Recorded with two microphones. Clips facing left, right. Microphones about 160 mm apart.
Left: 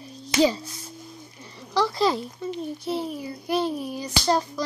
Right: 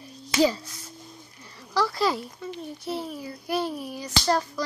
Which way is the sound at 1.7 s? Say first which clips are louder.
Left 2 dB; 20° left (ahead or behind).